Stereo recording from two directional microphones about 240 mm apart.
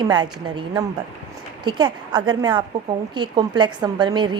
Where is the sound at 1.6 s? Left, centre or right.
Centre.